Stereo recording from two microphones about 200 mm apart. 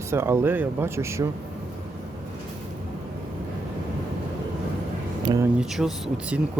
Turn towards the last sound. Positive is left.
turn(degrees=-5)  # may be behind; listen again after turning